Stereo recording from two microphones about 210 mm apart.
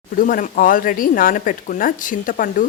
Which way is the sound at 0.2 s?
40° left (ahead or behind).